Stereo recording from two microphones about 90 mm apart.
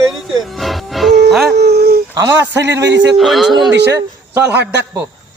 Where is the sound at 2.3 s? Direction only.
35° right (ahead or behind).